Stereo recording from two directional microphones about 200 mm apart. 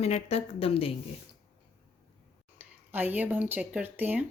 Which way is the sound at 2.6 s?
10° right (ahead or behind).